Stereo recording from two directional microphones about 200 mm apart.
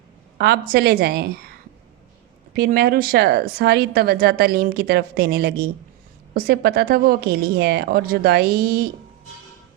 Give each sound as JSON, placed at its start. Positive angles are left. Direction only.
{"t": 0.3, "sound": "a woman's voice", "side_deg": -55}
{"t": 2.6, "sound": "a woman's voice", "side_deg": -50}